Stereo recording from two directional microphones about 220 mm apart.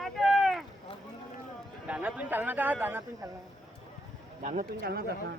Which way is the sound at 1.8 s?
5° right (ahead or behind).